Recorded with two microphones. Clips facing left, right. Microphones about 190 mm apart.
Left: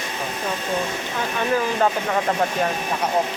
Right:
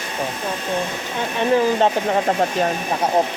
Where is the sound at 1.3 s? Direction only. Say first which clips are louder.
Right 5 dB; 25° right (ahead or behind).